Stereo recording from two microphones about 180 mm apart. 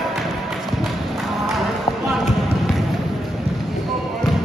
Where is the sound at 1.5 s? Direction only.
Centre (ahead or behind).